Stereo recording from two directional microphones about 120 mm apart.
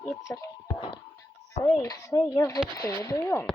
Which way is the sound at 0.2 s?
25° left (ahead or behind).